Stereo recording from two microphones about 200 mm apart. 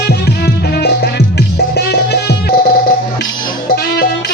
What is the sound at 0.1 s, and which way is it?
Music, 55° left (ahead or behind).